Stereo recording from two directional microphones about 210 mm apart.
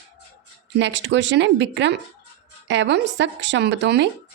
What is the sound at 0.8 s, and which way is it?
Speech, 60° right (ahead or behind).